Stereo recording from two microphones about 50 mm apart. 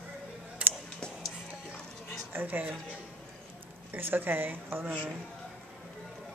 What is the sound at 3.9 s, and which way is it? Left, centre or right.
Speech, right.